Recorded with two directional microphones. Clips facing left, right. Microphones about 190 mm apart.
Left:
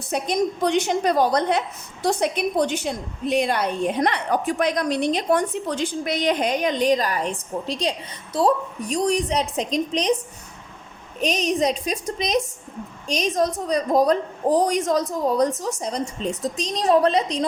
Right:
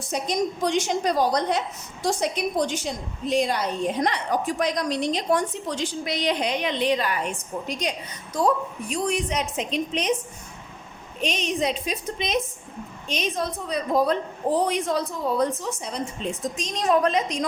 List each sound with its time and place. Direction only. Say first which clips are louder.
0.1 s a woman's voice: left 3 dB; 60° left (ahead or behind); by 10.2 s 35° left (ahead or behind)
11.2 s a woman's voice: left 4 dB; 40° left (ahead or behind)